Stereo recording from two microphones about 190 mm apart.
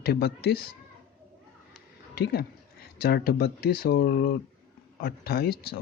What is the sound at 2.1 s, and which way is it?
Speech, 55° left (ahead or behind).